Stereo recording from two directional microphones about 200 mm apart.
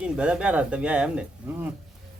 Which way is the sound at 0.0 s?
5° right (ahead or behind).